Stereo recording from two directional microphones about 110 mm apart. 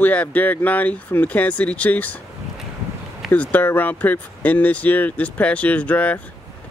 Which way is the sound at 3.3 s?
15° left (ahead or behind).